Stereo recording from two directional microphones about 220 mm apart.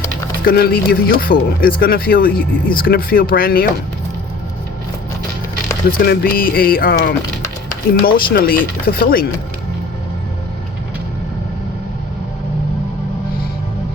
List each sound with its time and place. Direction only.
0.4 s speech: 45° left (ahead or behind)
6.0 s speech: 45° left (ahead or behind)